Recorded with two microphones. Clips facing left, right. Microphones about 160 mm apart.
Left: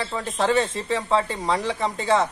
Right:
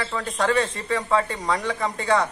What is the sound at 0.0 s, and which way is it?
Speech, 25° left (ahead or behind).